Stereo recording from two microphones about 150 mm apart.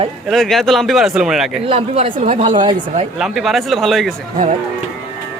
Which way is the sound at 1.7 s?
40° right (ahead or behind).